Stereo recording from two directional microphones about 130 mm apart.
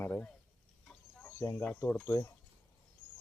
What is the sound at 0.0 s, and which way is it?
Speech, 10° left (ahead or behind).